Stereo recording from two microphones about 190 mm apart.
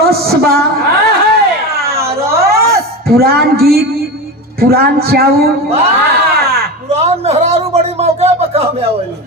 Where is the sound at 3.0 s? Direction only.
55° right (ahead or behind).